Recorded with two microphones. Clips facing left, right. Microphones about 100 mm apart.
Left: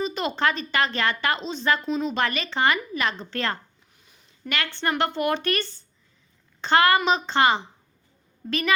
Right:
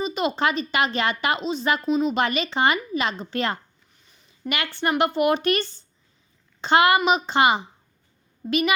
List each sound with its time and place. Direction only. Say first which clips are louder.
0.0 s a woman's voice: right 1 dB; 15° right (ahead or behind)
3.9 s a sound: right 1 dB; 5° left (ahead or behind)
4.4 s a woman's voice: right 2 dB; 15° right (ahead or behind)